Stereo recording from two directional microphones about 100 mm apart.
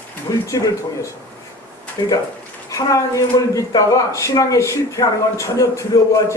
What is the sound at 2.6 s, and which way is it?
Speech, 30° left (ahead or behind).